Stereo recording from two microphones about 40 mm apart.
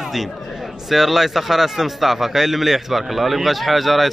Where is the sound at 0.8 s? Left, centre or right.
Centre.